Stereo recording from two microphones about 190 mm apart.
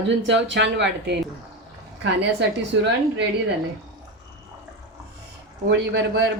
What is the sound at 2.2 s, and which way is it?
A woman's voice, 65° right (ahead or behind).